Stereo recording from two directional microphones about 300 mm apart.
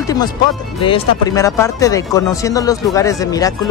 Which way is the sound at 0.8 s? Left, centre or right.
Centre.